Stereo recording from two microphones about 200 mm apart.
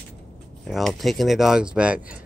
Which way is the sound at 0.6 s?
Centre (ahead or behind).